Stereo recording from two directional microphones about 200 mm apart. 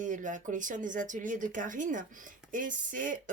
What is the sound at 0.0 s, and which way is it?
Speech, 40° right (ahead or behind).